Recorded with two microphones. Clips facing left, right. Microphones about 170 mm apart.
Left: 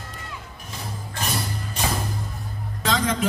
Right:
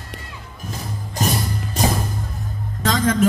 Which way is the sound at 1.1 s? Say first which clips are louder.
Right 6 dB; 40° right (ahead or behind).